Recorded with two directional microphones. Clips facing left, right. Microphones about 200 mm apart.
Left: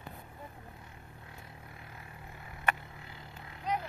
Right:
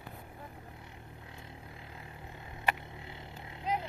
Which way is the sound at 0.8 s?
20° right (ahead or behind).